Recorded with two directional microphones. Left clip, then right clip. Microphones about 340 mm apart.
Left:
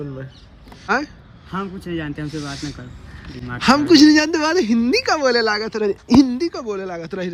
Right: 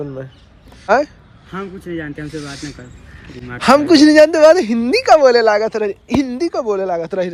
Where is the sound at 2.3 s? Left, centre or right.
Centre.